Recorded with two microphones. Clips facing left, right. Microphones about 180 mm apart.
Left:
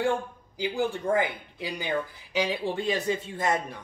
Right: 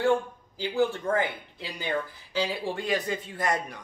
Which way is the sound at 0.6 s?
15° left (ahead or behind).